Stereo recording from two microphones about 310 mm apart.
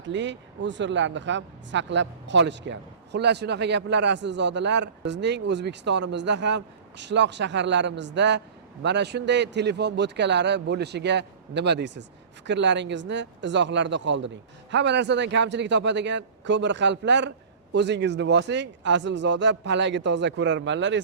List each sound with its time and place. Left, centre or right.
0.0 s speech: right